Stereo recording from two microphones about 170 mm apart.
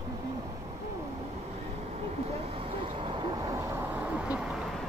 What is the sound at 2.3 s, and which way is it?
Vehicle, 35° right (ahead or behind).